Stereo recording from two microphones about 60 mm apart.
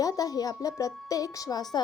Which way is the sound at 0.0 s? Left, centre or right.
Left.